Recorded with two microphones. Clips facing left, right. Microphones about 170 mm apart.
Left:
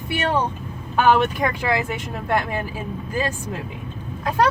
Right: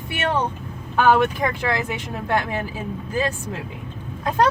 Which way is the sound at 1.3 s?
10° left (ahead or behind).